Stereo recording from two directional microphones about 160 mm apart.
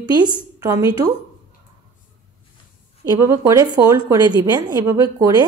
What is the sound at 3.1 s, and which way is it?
A woman's voice, 20° right (ahead or behind).